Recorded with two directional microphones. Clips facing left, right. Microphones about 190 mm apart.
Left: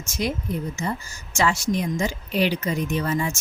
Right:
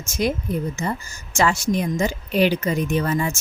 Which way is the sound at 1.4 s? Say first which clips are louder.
Right 2 dB; 50° right (ahead or behind).